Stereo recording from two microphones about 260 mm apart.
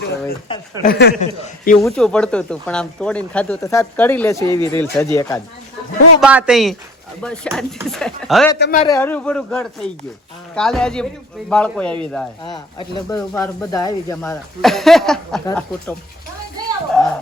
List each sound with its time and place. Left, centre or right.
0.0 s speech: left
1.8 s speech: centre
6.1 s speech: centre
8.5 s speech: left
8.8 s speech: centre
13.1 s speech: centre